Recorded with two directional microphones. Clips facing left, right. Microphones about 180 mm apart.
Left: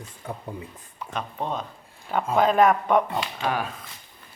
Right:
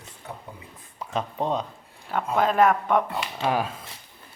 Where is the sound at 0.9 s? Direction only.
25° right (ahead or behind).